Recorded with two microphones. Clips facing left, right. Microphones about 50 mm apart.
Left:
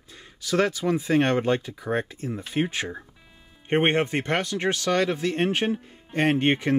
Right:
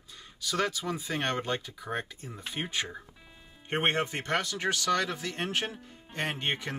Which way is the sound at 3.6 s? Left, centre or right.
Left.